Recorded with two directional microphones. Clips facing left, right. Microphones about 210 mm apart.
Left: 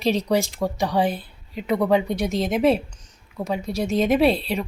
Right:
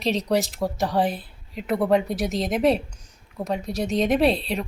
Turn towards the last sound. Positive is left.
turn(degrees=0)  # may be behind; listen again after turning